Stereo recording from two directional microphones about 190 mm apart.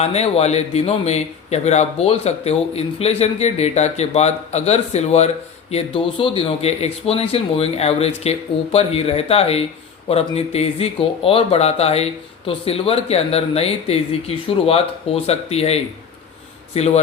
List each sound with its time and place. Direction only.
0.0 s a man's voice: 35° left (ahead or behind)